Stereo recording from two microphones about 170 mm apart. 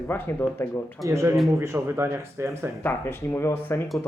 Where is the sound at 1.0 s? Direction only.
15° right (ahead or behind).